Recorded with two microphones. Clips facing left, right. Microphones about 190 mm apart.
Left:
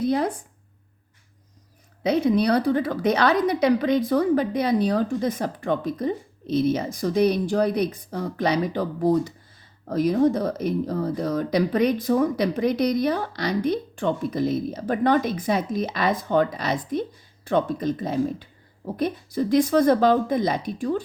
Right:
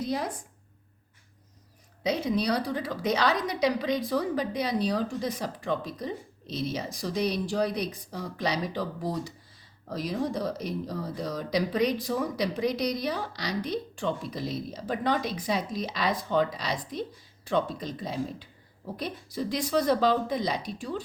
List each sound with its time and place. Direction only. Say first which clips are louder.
0.0 s speech: left 8 dB; 60° left (ahead or behind)
2.0 s speech: left 7 dB; 55° left (ahead or behind)